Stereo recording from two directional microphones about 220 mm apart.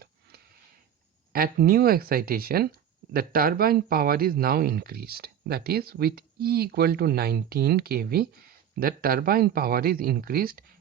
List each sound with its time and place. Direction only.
0.0 s sniff: 45° right (ahead or behind)
1.3 s speech: 40° right (ahead or behind)